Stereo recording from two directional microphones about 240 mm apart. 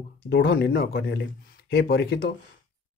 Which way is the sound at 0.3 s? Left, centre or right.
Left.